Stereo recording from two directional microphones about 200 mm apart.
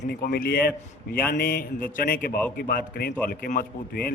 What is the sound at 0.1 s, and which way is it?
A man's voice, 45° left (ahead or behind).